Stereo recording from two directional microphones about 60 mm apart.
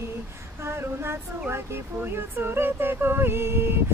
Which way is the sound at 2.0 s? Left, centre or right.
Right.